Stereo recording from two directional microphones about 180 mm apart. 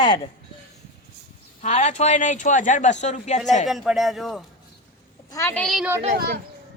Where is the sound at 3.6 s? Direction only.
Centre (ahead or behind).